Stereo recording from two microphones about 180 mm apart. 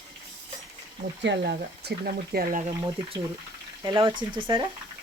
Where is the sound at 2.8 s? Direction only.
30° right (ahead or behind).